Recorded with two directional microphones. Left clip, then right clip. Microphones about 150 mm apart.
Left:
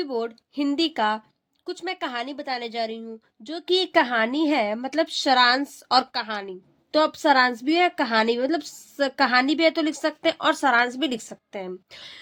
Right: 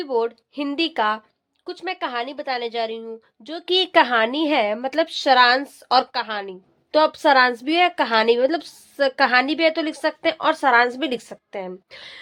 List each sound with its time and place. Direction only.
0.0 s a woman's voice: 25° left (ahead or behind)